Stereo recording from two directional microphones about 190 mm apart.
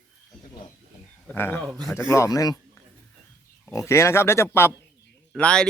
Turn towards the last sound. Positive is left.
turn(degrees=5)  # may be behind; listen again after turning